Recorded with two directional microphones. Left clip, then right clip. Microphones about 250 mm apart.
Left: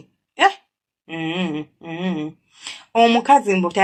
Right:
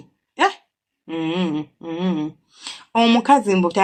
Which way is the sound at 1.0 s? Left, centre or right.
Right.